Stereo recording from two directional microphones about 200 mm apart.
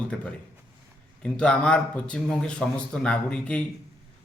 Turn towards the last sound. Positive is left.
turn(degrees=5)  # may be behind; listen again after turning